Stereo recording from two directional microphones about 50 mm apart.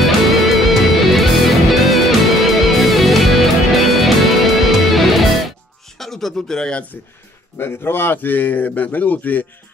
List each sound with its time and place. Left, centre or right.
0.0 s music: centre
5.9 s a sound: centre
7.5 s a man's voice: left